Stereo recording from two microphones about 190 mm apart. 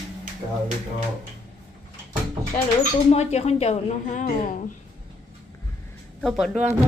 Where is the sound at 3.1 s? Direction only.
35° left (ahead or behind).